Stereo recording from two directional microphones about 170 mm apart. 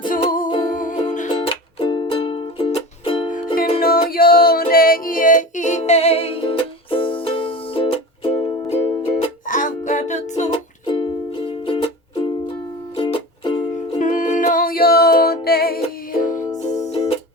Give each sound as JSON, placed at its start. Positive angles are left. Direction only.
{"t": 0.1, "sound": "music", "side_deg": 55}
{"t": 1.5, "sound": "music", "side_deg": 30}
{"t": 3.8, "sound": "music", "side_deg": 60}
{"t": 10.8, "sound": "music", "side_deg": 30}
{"t": 14.0, "sound": "music", "side_deg": 45}